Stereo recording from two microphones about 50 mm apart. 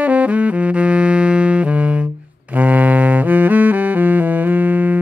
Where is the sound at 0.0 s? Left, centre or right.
Right.